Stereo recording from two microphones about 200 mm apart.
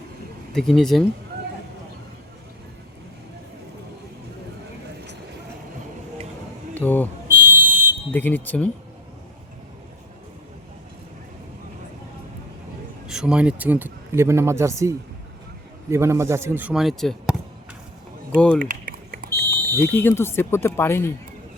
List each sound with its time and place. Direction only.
0.5 s speech: centre (ahead or behind)
6.7 s a sound: 10° left (ahead or behind)
7.3 s fire alarm: 45° right (ahead or behind)
8.1 s speech: 10° left (ahead or behind)
13.1 s speech: 5° right (ahead or behind)
18.3 s speech: 5° left (ahead or behind)
18.6 s typing: 45° right (ahead or behind)
19.7 s speech: 10° left (ahead or behind)